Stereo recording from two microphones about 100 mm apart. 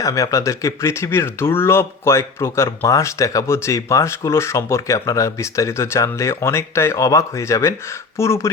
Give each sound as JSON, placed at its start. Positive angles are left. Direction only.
{"t": 0.0, "sound": "speech", "side_deg": 35}